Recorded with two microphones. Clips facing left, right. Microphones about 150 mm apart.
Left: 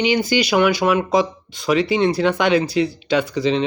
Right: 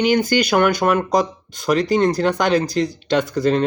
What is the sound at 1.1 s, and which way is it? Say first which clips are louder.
Speech: left 1 dB; 45° right (ahead or behind).